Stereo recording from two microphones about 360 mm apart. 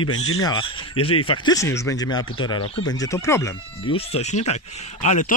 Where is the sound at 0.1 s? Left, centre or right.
Left.